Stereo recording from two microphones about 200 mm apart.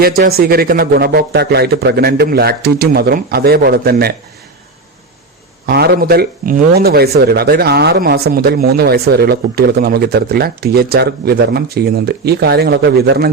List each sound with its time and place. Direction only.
0.0 s speech: 50° right (ahead or behind)
5.6 s speech: 50° right (ahead or behind)